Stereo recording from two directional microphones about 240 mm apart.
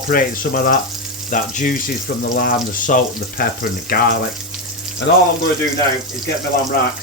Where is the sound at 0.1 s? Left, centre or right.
Left.